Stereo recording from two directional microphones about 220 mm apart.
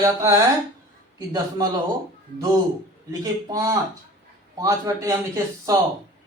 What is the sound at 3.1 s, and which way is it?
Speech, 15° right (ahead or behind).